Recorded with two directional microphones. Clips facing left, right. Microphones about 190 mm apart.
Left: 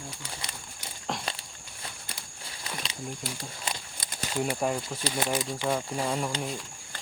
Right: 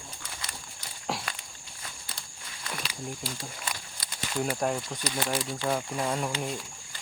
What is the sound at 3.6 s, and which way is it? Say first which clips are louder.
Walk: left 2 dB; 25° left (ahead or behind).